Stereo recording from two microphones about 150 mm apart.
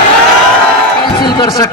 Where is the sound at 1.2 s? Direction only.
25° left (ahead or behind).